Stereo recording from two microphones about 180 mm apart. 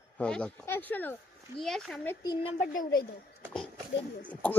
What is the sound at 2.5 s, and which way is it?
Speech, 50° left (ahead or behind).